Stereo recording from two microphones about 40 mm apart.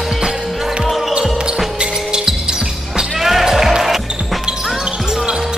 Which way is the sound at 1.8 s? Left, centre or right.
Centre.